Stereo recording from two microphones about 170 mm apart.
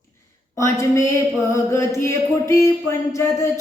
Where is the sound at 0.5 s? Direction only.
15° left (ahead or behind).